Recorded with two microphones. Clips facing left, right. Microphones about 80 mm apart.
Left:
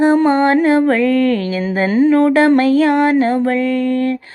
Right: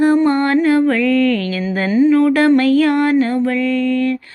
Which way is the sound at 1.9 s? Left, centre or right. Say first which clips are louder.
Even; left.